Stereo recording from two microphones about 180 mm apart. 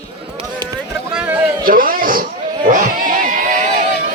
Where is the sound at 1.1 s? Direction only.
10° right (ahead or behind).